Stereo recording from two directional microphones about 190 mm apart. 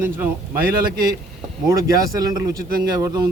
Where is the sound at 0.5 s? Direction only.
50° right (ahead or behind).